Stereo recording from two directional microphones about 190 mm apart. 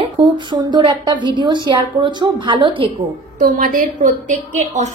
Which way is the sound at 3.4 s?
45° right (ahead or behind).